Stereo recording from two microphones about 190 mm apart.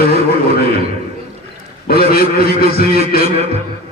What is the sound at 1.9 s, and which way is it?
A man's voice, 55° left (ahead or behind).